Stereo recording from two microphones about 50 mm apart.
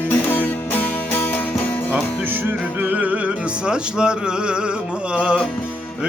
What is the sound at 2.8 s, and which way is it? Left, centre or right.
Music, right.